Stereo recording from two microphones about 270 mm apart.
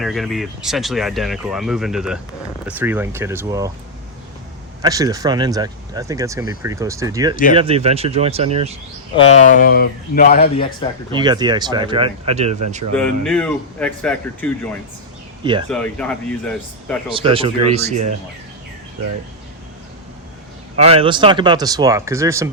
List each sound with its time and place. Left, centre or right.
0.0 s speech: centre
4.8 s speech: centre
9.4 s speech: left
11.1 s speech: centre
12.9 s speech: centre
17.1 s speech: centre
20.7 s speech: right